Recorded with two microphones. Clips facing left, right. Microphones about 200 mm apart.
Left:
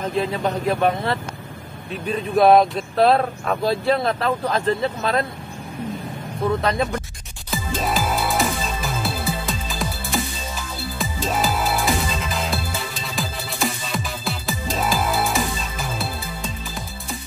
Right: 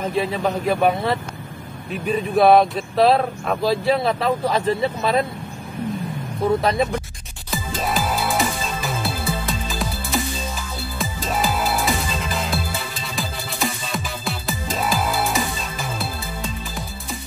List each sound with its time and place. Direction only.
0.0 s speech: 5° right (ahead or behind)
6.6 s speech: 5° right (ahead or behind)
7.5 s music: centre (ahead or behind)